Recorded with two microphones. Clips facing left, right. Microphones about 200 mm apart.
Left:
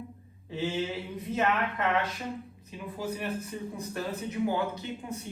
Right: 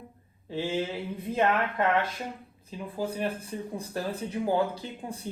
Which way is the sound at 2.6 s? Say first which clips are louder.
Right 3 dB; 30° right (ahead or behind).